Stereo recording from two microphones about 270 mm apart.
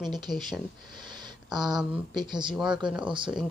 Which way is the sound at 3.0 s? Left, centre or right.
Centre.